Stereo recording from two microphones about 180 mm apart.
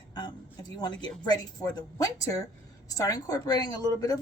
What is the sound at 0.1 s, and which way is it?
A woman's voice, 25° left (ahead or behind).